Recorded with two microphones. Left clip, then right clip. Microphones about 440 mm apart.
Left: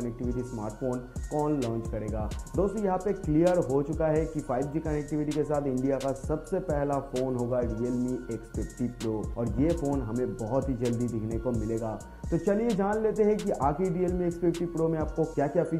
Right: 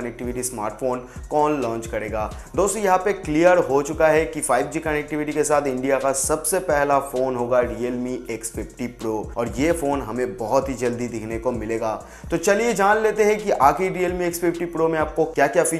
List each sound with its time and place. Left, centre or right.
0.6 s speech: centre